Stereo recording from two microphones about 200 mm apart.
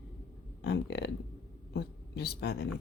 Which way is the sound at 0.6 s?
60° left (ahead or behind).